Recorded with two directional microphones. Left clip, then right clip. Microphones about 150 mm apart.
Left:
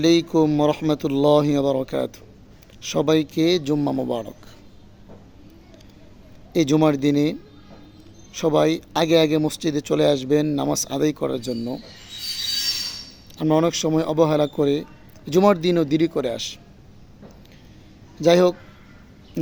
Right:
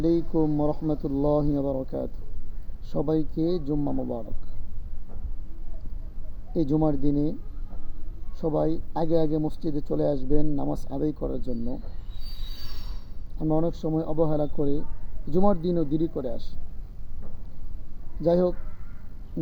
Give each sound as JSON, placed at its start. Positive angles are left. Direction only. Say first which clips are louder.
{"t": 0.3, "sound": "a man's voice", "louder": "left 7 dB", "side_deg": 40}
{"t": 6.5, "sound": "a man's voice", "louder": "left 7 dB", "side_deg": 45}
{"t": 8.3, "sound": "a man's voice", "louder": "left 7 dB", "side_deg": 45}
{"t": 13.3, "sound": "a man's voice", "louder": "left 7 dB", "side_deg": 45}
{"t": 18.2, "sound": "a man's voice", "louder": "left 7 dB", "side_deg": 45}